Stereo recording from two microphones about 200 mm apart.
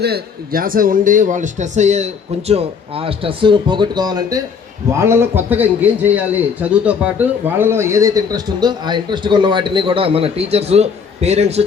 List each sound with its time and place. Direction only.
0.0 s a man's voice: 50° right (ahead or behind); by 11.6 s 30° right (ahead or behind)